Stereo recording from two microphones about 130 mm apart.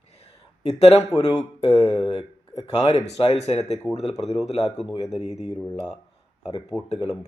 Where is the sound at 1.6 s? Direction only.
50° left (ahead or behind).